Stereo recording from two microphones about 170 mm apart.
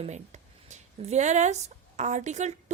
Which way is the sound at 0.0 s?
40° right (ahead or behind).